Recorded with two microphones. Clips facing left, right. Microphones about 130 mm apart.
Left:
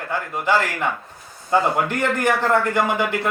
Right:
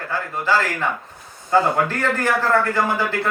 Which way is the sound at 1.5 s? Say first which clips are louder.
Right 1 dB; 20° left (ahead or behind).